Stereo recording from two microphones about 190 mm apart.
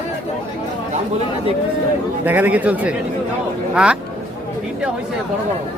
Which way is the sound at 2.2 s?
10° right (ahead or behind).